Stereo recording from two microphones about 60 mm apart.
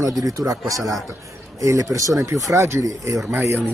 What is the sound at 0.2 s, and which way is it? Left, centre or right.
Speech, right.